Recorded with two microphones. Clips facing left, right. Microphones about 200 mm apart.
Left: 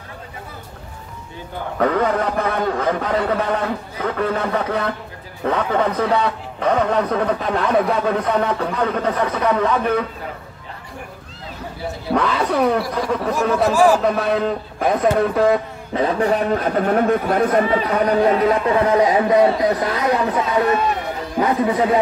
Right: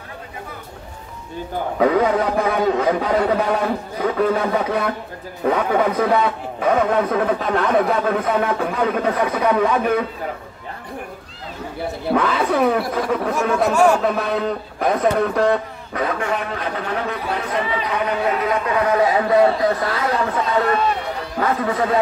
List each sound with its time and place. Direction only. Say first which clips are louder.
1.8 s a man's voice: right 2 dB; 10° right (ahead or behind)
12.1 s speech: even; 5° right (ahead or behind)
15.9 s a man's voice: left 5 dB; 30° left (ahead or behind)
18.9 s a man's voice: even; 20° left (ahead or behind)